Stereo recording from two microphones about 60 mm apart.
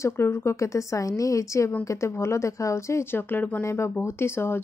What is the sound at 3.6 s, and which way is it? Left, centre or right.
Speech, left.